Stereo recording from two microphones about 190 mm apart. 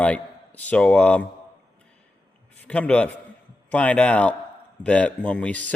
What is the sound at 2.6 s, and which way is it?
A man's voice, 5° left (ahead or behind).